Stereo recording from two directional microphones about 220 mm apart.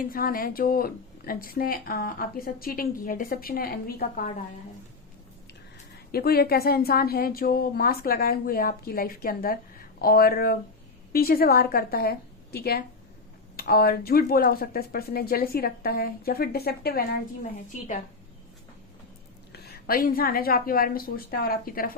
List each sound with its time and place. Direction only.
0.0 s a woman's voice: 40° left (ahead or behind)
6.1 s a woman's voice: 45° left (ahead or behind)
19.5 s a woman's voice: 45° left (ahead or behind)